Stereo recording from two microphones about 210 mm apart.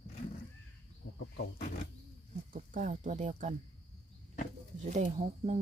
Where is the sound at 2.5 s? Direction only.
35° right (ahead or behind).